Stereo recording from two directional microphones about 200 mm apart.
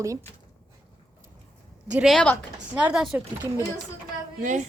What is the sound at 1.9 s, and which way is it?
Speech, centre (ahead or behind).